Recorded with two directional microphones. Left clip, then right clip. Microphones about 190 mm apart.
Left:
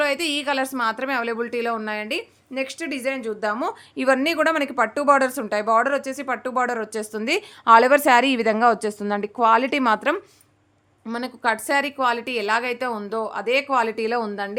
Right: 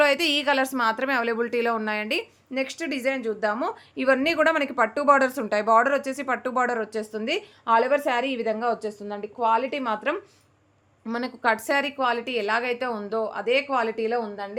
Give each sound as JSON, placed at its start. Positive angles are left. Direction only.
{"t": 0.0, "sound": "a woman's voice", "side_deg": -5}
{"t": 11.0, "sound": "a woman's voice", "side_deg": 5}
{"t": 14.2, "sound": "a woman's voice", "side_deg": 45}